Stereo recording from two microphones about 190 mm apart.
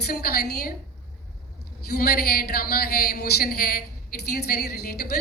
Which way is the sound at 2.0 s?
55° left (ahead or behind).